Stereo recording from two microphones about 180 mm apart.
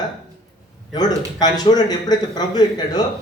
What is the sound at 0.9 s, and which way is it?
Speech, 20° left (ahead or behind).